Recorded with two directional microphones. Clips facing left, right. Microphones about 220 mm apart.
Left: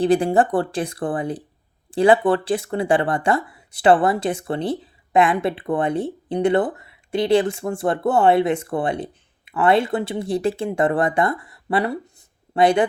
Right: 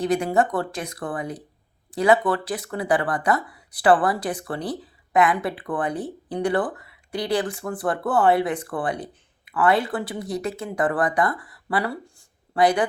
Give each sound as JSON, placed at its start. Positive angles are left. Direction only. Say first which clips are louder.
{"t": 0.0, "sound": "speech", "louder": "left 4 dB", "side_deg": 30}